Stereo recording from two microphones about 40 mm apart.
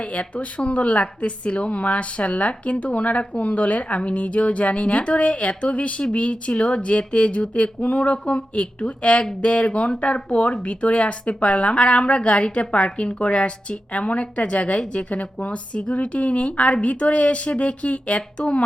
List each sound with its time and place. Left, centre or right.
0.0 s a woman's voice: left